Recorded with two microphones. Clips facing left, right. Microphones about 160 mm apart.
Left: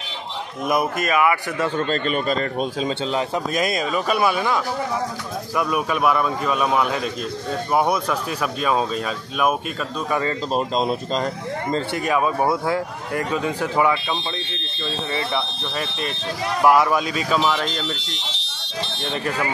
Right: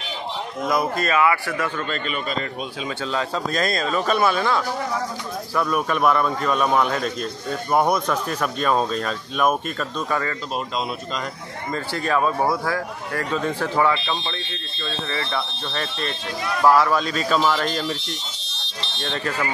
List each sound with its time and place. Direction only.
0.7 s speech: 20° left (ahead or behind)
1.8 s a man's voice: 40° left (ahead or behind)
3.0 s speech: 20° left (ahead or behind)
5.6 s speech: 5° left (ahead or behind)
10.5 s a man's voice: 35° left (ahead or behind)
12.1 s speech: 10° left (ahead or behind)
12.4 s a man's voice: 25° left (ahead or behind)
13.3 s speech: 15° left (ahead or behind)
17.6 s speech: centre (ahead or behind)
18.9 s speech: 10° left (ahead or behind)